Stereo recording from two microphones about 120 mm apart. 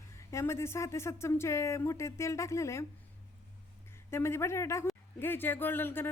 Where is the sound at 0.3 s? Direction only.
25° left (ahead or behind).